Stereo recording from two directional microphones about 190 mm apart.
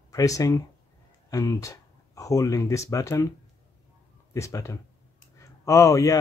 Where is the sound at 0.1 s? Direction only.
15° left (ahead or behind).